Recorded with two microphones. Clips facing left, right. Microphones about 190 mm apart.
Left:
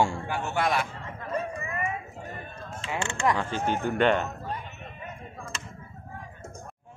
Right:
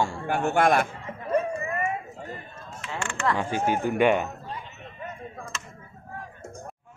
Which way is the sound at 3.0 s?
20° left (ahead or behind).